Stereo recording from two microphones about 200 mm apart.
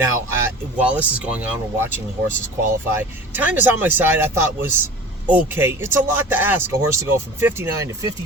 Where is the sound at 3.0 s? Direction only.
10° right (ahead or behind).